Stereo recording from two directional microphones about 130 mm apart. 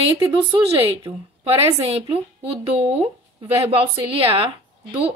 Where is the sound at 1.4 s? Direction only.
50° right (ahead or behind).